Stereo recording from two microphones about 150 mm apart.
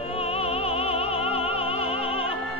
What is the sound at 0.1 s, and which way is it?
Music, 40° left (ahead or behind).